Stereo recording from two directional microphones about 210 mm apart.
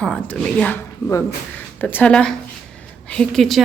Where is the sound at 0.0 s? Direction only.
5° left (ahead or behind).